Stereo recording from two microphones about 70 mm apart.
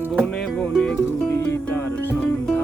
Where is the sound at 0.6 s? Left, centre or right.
Centre.